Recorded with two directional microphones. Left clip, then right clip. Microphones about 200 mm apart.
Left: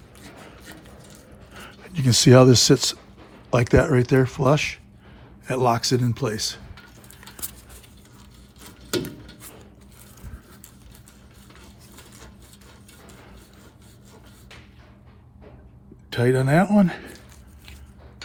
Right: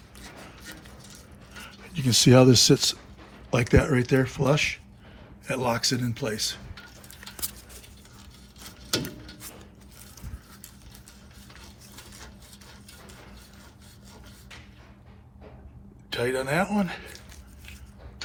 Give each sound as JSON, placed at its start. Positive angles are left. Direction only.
{"t": 1.5, "sound": "speech", "side_deg": 50}
{"t": 3.5, "sound": "speech", "side_deg": 35}
{"t": 16.0, "sound": "speech", "side_deg": 55}